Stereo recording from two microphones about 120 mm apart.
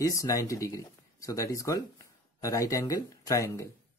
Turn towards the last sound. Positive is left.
turn(degrees=25)  # may be behind; listen again after turning